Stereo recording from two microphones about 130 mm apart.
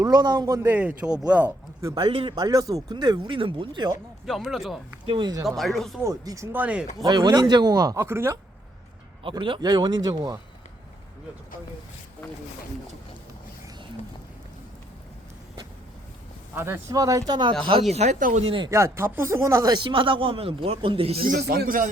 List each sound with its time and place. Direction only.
0.0 s speech: 30° right (ahead or behind); by 1.5 s 10° right (ahead or behind)
1.8 s speech: 35° right (ahead or behind)
4.3 s speech: centre (ahead or behind)
5.0 s speech: 40° right (ahead or behind)
5.5 s speech: centre (ahead or behind)
6.1 s speech: 25° right (ahead or behind)
7.0 s speech: 30° right (ahead or behind)
9.2 s speech: 40° right (ahead or behind)
16.6 s speech: 15° right (ahead or behind); by 17.5 s 35° right (ahead or behind)
17.9 s speech: 60° right (ahead or behind); by 18.4 s 75° right (ahead or behind)
18.4 s speech: 40° right (ahead or behind)
18.7 s speech: 20° right (ahead or behind); by 21.2 s 45° right (ahead or behind)
21.2 s speech: 90° right